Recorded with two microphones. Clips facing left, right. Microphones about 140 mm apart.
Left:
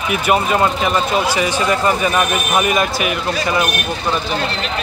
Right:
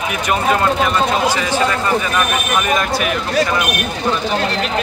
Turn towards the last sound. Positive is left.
turn(degrees=5)  # may be behind; listen again after turning